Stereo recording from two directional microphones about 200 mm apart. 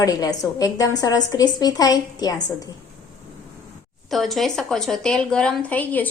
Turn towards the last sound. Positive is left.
turn(degrees=10)  # may be behind; listen again after turning